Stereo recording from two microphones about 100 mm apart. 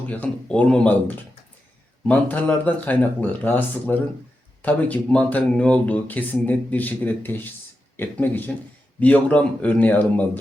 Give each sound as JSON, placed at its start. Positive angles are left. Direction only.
{"t": 0.1, "sound": "speech", "side_deg": 10}